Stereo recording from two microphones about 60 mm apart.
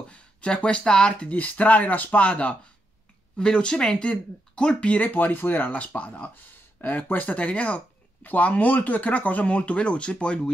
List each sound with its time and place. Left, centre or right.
0.1 s speech: centre